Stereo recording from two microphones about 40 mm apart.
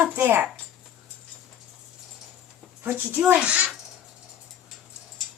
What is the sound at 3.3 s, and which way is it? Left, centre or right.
Speech, right.